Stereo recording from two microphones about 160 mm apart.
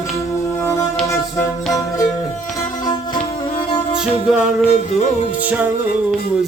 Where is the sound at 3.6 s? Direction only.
35° left (ahead or behind).